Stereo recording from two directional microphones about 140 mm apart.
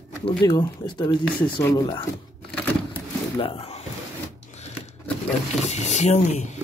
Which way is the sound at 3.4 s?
45° left (ahead or behind).